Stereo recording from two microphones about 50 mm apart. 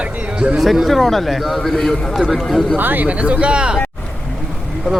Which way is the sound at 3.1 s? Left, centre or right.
Right.